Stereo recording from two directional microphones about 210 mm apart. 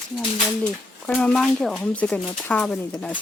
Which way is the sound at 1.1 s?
5° left (ahead or behind).